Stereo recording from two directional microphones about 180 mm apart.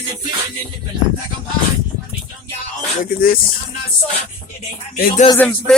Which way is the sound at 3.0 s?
55° left (ahead or behind).